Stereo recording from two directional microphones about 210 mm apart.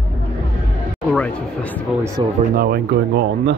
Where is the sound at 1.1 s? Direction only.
5° left (ahead or behind).